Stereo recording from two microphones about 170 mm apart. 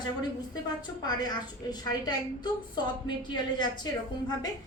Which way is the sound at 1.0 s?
25° left (ahead or behind).